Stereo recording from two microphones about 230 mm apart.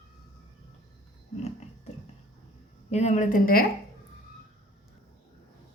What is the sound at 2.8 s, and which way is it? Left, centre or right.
Speech, left.